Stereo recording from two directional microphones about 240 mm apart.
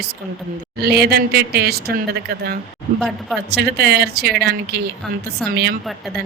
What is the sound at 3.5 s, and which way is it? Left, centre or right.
Speech, right.